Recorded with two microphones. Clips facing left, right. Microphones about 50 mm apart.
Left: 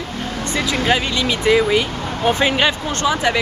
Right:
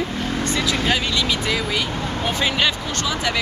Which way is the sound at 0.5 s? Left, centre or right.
Centre.